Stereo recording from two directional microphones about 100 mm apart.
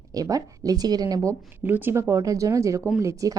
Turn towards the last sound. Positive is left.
turn(degrees=-30)  # may be behind; listen again after turning